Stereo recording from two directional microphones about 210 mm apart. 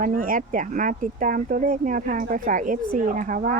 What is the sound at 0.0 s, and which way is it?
Speech, 40° right (ahead or behind).